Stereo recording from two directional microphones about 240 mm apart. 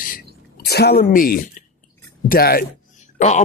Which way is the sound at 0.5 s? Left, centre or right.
Left.